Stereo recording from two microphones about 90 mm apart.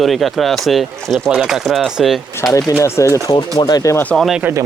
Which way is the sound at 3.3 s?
50° left (ahead or behind).